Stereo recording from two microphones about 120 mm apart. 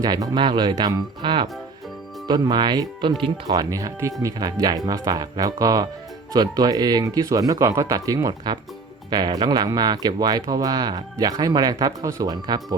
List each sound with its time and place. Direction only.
0.0 s speech: 35° right (ahead or behind)
3.5 s speech: 30° right (ahead or behind)